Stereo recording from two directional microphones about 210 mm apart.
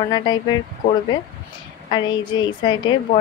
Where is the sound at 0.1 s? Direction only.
20° left (ahead or behind).